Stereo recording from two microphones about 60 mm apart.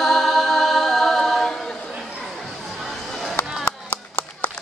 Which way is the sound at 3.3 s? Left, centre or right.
Left.